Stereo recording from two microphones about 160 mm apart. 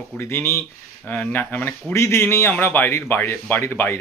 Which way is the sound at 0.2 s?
15° left (ahead or behind).